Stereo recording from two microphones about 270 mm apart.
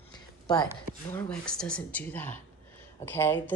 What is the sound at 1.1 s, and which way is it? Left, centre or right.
Speech, centre.